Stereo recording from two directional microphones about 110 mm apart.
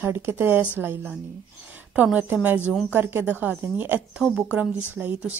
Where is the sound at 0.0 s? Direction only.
20° right (ahead or behind).